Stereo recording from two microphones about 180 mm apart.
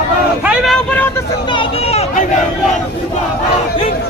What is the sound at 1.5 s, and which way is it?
Speech, 30° left (ahead or behind).